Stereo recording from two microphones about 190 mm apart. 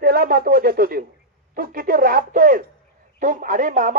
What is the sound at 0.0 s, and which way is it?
Speech, 50° right (ahead or behind).